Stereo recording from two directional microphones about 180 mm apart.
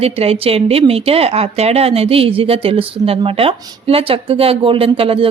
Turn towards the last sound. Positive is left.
turn(degrees=-30)  # may be behind; listen again after turning